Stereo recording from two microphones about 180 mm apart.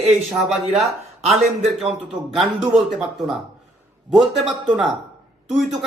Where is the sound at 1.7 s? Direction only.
Centre (ahead or behind).